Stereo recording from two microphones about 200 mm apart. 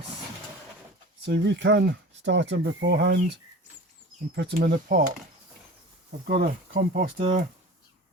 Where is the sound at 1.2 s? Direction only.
60° right (ahead or behind).